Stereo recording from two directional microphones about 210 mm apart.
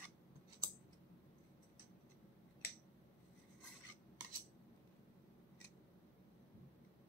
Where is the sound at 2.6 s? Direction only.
45° left (ahead or behind).